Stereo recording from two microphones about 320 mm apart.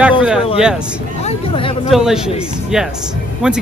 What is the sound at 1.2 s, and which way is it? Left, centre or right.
Speech, centre.